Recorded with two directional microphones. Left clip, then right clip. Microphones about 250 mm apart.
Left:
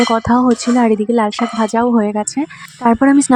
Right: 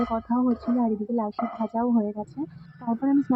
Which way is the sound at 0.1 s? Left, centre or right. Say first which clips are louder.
Left 13 dB; left.